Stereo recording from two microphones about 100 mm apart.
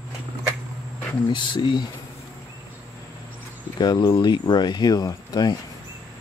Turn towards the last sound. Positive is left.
turn(degrees=40)  # may be behind; listen again after turning